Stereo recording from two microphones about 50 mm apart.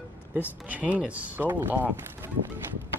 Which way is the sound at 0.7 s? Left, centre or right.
Right.